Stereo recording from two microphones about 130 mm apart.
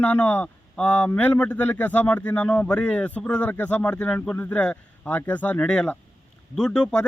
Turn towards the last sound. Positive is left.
turn(degrees=5)  # may be behind; listen again after turning